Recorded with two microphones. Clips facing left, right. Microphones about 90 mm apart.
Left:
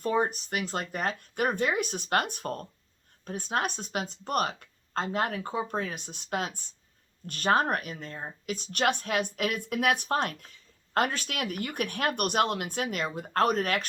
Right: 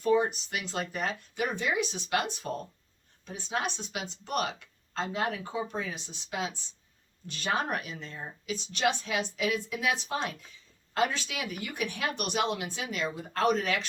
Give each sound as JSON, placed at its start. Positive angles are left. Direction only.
{"t": 0.0, "sound": "speech", "side_deg": 40}